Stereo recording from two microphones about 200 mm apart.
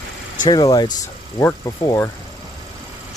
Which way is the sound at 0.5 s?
20° left (ahead or behind).